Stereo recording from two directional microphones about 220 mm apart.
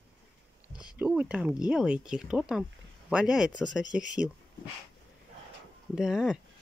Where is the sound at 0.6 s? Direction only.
20° left (ahead or behind).